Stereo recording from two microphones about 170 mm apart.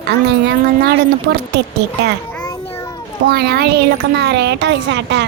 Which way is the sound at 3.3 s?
70° right (ahead or behind).